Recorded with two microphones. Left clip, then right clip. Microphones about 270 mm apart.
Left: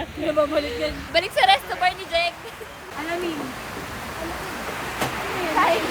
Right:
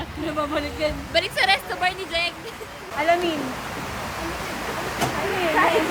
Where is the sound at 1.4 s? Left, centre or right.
Centre.